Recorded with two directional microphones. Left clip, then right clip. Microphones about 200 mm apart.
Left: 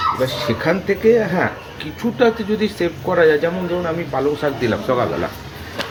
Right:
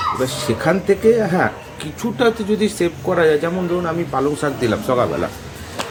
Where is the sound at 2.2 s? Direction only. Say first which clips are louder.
Even; 15° right (ahead or behind).